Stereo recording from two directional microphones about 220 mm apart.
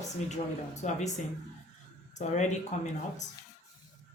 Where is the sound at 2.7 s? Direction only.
35° left (ahead or behind).